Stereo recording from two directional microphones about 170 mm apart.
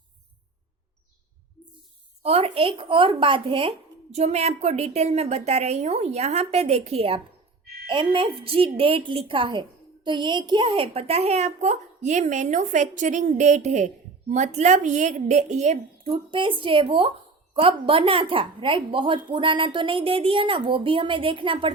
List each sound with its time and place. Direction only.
2.2 s a woman's voice: 35° right (ahead or behind)
16.3 s a woman's voice: 30° right (ahead or behind)